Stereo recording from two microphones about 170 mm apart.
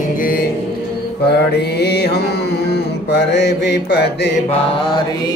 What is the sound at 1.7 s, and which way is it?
Music, 75° left (ahead or behind).